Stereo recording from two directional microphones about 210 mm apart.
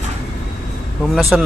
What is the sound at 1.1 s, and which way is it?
Speech, centre (ahead or behind).